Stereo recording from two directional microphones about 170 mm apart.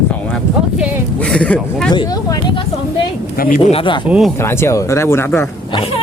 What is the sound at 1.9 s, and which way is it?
Speech, 25° left (ahead or behind).